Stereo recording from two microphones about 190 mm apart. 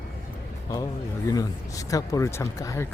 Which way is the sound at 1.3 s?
20° left (ahead or behind).